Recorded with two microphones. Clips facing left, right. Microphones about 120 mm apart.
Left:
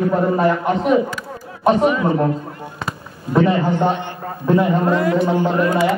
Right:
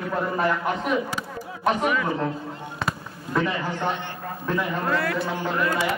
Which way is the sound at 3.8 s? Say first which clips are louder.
Left 8 dB; 50° left (ahead or behind).